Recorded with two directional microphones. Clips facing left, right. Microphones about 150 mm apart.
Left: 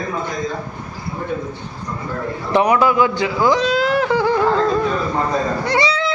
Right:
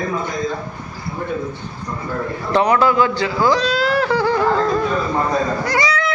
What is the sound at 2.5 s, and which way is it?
A man's voice, 15° left (ahead or behind).